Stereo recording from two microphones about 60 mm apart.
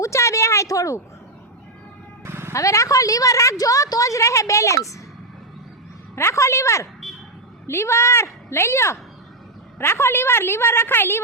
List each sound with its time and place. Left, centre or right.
0.0 s a sound: left
2.2 s music: right
2.5 s a woman's voice: left
6.1 s a woman's voice: left